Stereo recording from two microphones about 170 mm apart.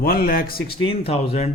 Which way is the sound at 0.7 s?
35° left (ahead or behind).